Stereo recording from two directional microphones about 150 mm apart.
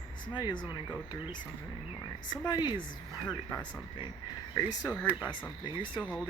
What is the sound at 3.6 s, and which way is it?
Speech, 30° left (ahead or behind).